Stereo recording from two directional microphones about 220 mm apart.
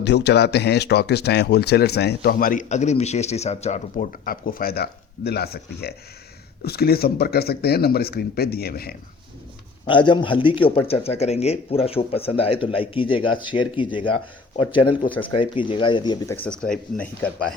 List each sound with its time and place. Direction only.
0.0 s speech: 50° left (ahead or behind)
9.8 s speech: 20° left (ahead or behind); by 17.3 s 5° left (ahead or behind)